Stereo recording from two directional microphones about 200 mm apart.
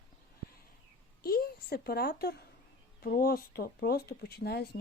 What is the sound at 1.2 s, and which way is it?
Speech, 50° left (ahead or behind).